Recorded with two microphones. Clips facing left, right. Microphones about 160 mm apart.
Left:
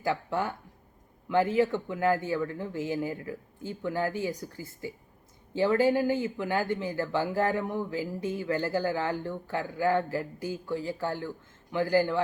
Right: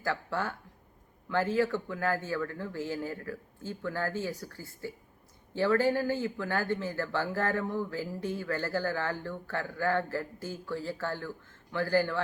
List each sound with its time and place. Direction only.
0.0 s speech: 15° left (ahead or behind)